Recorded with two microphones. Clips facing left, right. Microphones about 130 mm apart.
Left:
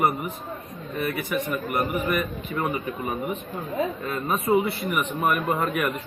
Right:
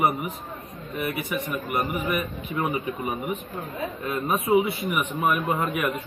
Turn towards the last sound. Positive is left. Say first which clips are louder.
# left 1 dB
turn(degrees=0)  # may be behind; listen again after turning